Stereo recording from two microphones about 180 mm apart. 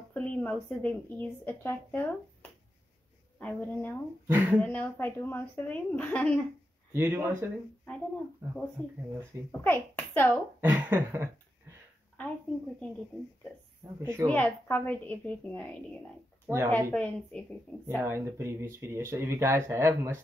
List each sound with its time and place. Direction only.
0.1 s speech: 10° left (ahead or behind)
3.3 s speech: 10° left (ahead or behind)
4.3 s speech: 10° right (ahead or behind)
4.6 s speech: 10° left (ahead or behind)
6.9 s speech: 15° right (ahead or behind)
9.5 s speech: 10° left (ahead or behind)
10.6 s speech: 10° right (ahead or behind)
12.2 s speech: 10° left (ahead or behind)
13.9 s speech: 15° right (ahead or behind)
14.2 s speech: 10° left (ahead or behind)
16.4 s speech: 15° right (ahead or behind)
16.7 s speech: 5° left (ahead or behind)
17.8 s speech: 15° right (ahead or behind)